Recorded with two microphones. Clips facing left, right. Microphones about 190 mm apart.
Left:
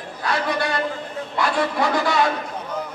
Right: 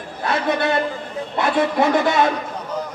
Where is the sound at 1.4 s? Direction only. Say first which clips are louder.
Right 4 dB; 20° right (ahead or behind).